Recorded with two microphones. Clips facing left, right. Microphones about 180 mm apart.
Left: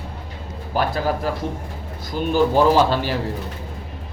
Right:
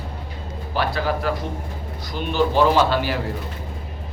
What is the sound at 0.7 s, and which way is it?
Speech, 45° left (ahead or behind).